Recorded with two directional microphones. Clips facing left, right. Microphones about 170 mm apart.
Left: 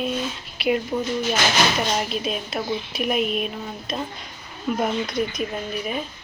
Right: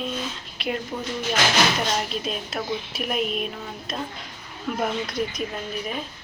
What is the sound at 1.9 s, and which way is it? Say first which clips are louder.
A woman's voice: left 2 dB; 5° left (ahead or behind).